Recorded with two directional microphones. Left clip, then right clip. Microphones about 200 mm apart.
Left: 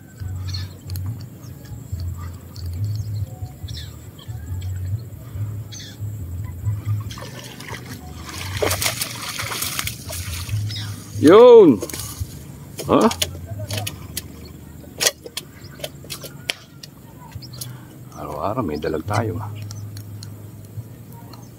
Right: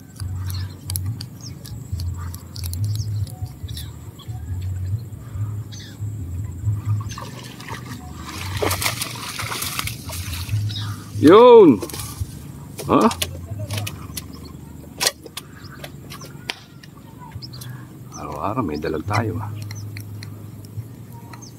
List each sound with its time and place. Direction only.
7.1 s trickle: 5° left (ahead or behind)
11.1 s speech: 5° left (ahead or behind)
12.7 s vehicle: 5° left (ahead or behind)
16.5 s a sound: 40° left (ahead or behind)
18.1 s speech: 5° left (ahead or behind)